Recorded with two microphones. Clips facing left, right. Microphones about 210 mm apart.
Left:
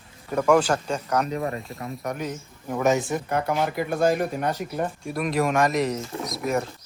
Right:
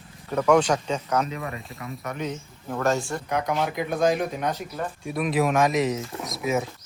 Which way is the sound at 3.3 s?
5° left (ahead or behind).